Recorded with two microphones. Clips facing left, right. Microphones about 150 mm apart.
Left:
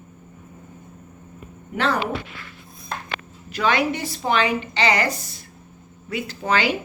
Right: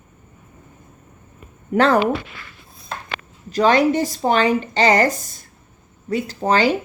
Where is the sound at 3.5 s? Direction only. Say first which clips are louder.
Right 6 dB; 40° right (ahead or behind).